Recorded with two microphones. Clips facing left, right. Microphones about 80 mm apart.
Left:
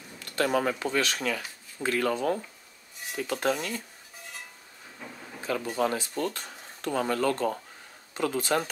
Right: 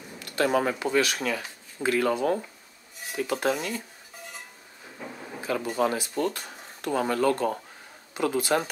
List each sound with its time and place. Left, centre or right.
0.1 s speech: centre
5.0 s a sound: centre
5.8 s speech: centre